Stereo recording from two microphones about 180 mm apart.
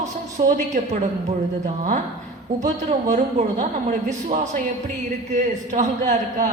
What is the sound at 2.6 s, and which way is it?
A woman's voice, 45° right (ahead or behind).